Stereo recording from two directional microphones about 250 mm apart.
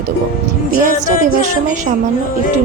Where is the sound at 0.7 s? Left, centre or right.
Right.